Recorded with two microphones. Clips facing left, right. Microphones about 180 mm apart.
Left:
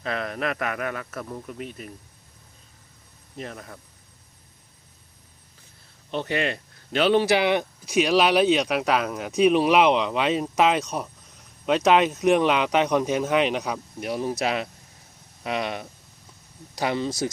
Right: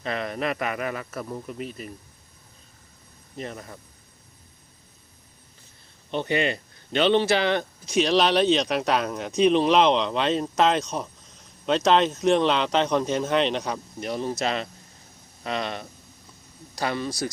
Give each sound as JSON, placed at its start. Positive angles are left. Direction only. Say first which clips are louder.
{"t": 0.0, "sound": "speech", "louder": "even", "side_deg": 0}
{"t": 3.3, "sound": "speech", "louder": "right 1 dB", "side_deg": 0}
{"t": 6.1, "sound": "speech", "louder": "right 1 dB", "side_deg": 0}